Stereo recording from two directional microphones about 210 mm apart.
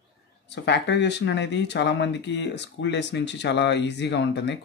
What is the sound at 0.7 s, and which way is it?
Speech, 55° left (ahead or behind).